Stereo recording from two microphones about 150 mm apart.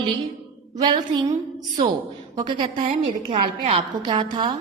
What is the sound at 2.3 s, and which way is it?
A woman's voice, 30° right (ahead or behind).